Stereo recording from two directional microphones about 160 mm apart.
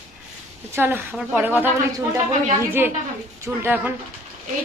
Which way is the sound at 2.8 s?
15° right (ahead or behind).